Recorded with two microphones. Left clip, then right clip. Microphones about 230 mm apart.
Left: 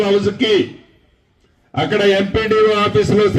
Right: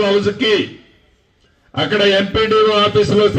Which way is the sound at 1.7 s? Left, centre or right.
Left.